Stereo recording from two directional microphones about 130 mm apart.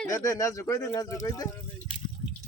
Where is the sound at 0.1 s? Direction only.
25° left (ahead or behind).